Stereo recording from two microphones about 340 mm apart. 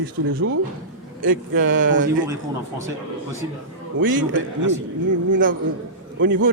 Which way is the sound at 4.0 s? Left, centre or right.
Right.